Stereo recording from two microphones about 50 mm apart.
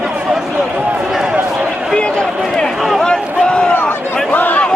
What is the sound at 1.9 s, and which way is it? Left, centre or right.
Run, centre.